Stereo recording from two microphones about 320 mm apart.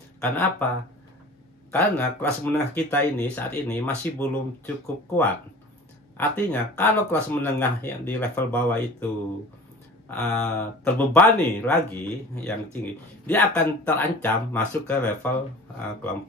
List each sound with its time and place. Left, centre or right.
0.2 s speech: centre
1.7 s speech: centre
10.0 s speech: centre